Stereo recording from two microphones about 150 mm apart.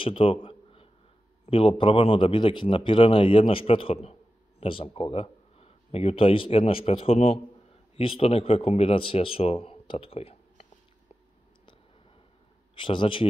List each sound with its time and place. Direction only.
0.0 s a sound: 35° left (ahead or behind)
1.4 s a man's voice: 40° left (ahead or behind)
12.7 s speech: 35° left (ahead or behind)